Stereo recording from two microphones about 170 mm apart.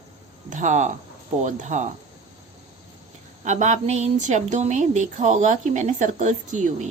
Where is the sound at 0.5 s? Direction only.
45° right (ahead or behind).